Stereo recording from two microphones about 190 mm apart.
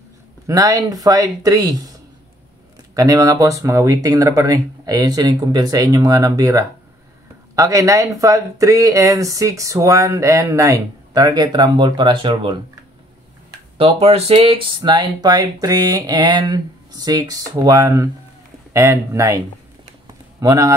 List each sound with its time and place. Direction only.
0.5 s speech: 20° right (ahead or behind)
13.7 s speech: 30° right (ahead or behind)